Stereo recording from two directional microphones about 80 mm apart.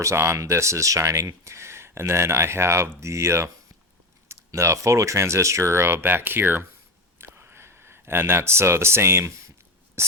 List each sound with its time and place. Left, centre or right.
0.0 s speech: right
7.2 s a sound: right
10.0 s writing: right